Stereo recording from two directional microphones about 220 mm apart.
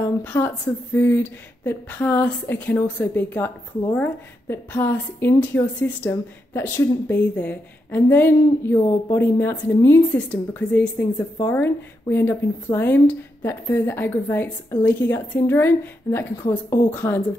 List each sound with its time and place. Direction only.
0.0 s a woman's voice: 10° left (ahead or behind)